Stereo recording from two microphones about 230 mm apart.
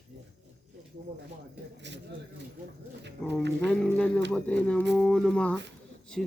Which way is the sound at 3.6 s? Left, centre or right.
Centre.